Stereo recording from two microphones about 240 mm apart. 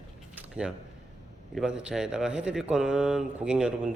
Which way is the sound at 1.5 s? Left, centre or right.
Centre.